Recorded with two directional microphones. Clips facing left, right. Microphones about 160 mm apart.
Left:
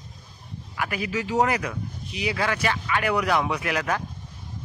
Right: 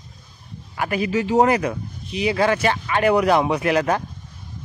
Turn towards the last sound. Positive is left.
turn(degrees=-30)  # may be behind; listen again after turning